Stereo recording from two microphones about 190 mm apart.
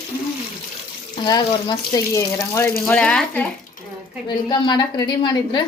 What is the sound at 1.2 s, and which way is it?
Speech, 20° left (ahead or behind).